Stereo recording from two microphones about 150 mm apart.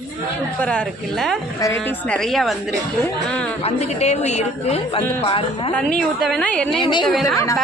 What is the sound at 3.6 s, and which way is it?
A woman's voice, 45° left (ahead or behind).